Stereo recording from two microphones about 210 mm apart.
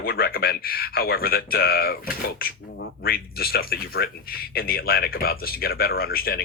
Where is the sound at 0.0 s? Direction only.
45° left (ahead or behind).